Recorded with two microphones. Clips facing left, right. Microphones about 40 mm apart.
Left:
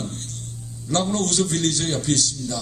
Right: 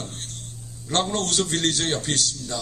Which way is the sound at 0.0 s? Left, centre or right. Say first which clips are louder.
Left 4 dB; right.